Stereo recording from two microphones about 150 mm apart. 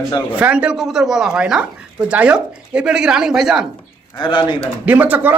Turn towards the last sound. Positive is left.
turn(degrees=-10)  # may be behind; listen again after turning